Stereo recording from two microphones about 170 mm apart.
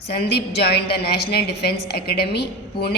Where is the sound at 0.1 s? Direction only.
75° left (ahead or behind).